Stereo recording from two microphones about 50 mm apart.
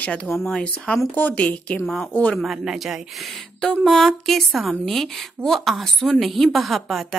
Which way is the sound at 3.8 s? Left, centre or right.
Centre.